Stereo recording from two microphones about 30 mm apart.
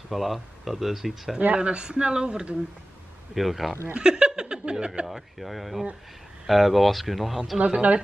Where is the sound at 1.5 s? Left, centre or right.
Right.